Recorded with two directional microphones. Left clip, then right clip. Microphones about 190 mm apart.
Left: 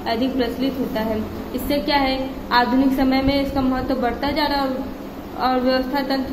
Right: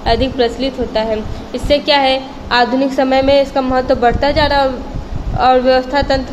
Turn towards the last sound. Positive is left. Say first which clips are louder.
# right 8 dB
turn(degrees=-25)  # may be behind; listen again after turning